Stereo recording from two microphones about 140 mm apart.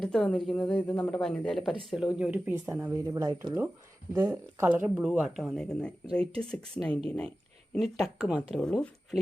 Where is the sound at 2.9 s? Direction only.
25° right (ahead or behind).